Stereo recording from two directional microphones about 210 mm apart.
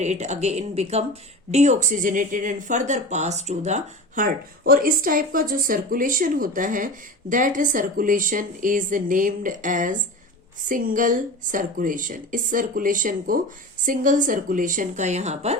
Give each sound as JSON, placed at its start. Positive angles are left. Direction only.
{"t": 0.0, "sound": "speech", "side_deg": -35}